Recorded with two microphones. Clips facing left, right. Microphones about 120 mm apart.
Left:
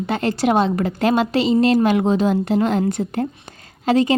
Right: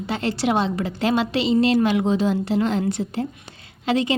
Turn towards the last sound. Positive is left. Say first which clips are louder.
# left 5 dB
turn(degrees=40)  # may be behind; listen again after turning